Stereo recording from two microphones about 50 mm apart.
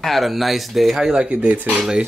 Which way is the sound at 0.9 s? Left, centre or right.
Centre.